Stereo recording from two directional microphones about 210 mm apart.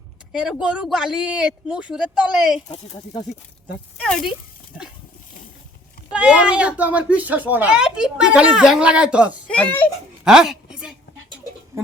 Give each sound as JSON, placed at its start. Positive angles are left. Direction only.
{"t": 0.3, "sound": "speech", "side_deg": -5}
{"t": 2.7, "sound": "speech", "side_deg": 25}
{"t": 4.0, "sound": "speech", "side_deg": 0}
{"t": 6.1, "sound": "speech", "side_deg": -5}
{"t": 9.5, "sound": "speech", "side_deg": 5}
{"t": 10.2, "sound": "a sound", "side_deg": -5}